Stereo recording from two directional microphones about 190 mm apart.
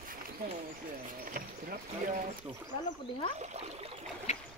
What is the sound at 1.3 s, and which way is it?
Speech, 45° right (ahead or behind).